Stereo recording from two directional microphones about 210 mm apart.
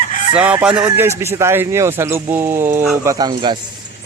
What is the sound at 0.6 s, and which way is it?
A man's voice, 5° right (ahead or behind).